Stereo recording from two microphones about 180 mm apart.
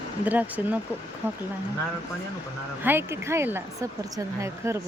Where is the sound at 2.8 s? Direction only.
15° right (ahead or behind).